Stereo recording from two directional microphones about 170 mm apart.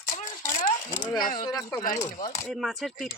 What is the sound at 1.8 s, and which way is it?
Speech, 45° left (ahead or behind).